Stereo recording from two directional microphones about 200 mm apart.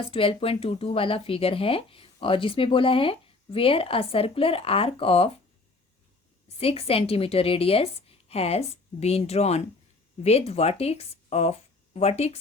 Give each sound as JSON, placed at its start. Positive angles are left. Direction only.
{"t": 0.0, "sound": "speech", "side_deg": 25}
{"t": 6.6, "sound": "speech", "side_deg": 30}